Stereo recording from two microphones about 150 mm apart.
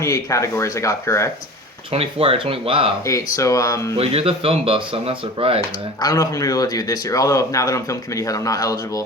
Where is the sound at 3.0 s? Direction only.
20° left (ahead or behind).